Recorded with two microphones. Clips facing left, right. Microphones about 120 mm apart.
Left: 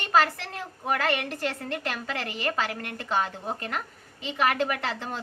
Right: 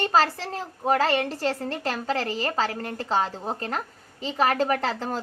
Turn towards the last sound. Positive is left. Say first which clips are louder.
# right 6 dB
turn(degrees=-35)  # may be behind; listen again after turning